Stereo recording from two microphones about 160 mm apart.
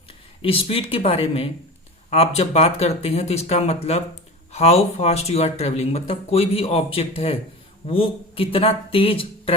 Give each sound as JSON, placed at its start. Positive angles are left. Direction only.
{"t": 0.4, "sound": "speech", "side_deg": 35}